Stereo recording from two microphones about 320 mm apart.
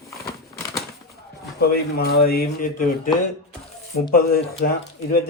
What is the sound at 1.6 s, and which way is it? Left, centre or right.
A man's voice, left.